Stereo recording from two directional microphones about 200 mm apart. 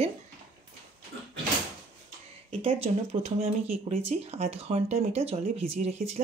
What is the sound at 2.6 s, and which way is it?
Speech, 30° right (ahead or behind).